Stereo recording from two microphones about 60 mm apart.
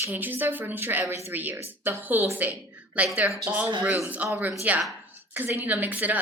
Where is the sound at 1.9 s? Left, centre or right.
Right.